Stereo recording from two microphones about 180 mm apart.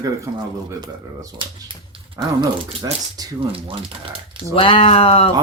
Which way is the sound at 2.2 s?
20° right (ahead or behind).